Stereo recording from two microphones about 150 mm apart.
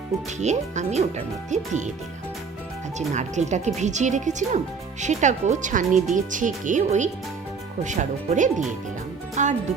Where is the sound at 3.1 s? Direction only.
50° right (ahead or behind).